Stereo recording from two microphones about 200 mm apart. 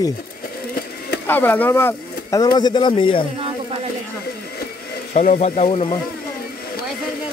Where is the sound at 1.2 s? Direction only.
10° left (ahead or behind); by 3.3 s 25° left (ahead or behind).